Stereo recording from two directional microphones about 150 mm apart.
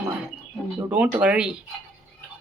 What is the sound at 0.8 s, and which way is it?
Speech, 10° right (ahead or behind).